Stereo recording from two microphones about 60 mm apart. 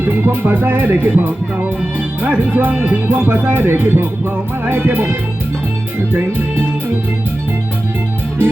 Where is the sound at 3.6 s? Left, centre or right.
Right.